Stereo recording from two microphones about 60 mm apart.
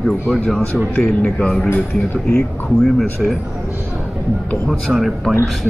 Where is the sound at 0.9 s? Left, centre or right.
Centre.